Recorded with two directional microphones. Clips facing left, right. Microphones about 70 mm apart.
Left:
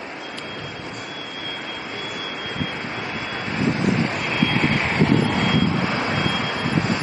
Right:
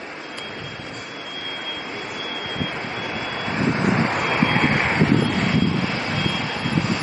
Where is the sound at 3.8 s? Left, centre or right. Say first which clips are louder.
Right 2 dB; right.